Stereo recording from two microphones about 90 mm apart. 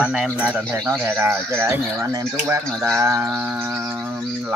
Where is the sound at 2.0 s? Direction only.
40° right (ahead or behind).